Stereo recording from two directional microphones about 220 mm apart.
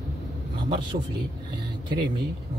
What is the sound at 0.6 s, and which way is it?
Speech, 20° right (ahead or behind).